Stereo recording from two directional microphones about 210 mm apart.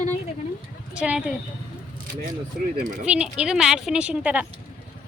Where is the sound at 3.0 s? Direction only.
5° right (ahead or behind).